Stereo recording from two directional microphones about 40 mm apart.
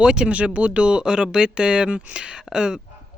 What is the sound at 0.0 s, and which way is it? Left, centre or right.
Speech, right.